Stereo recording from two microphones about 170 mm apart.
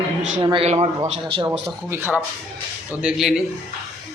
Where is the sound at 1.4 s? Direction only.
5° right (ahead or behind).